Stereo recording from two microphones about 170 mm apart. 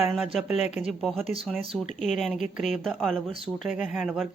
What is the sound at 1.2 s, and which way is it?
Speech, 35° right (ahead or behind).